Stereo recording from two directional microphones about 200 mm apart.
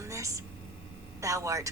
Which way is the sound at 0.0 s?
15° right (ahead or behind).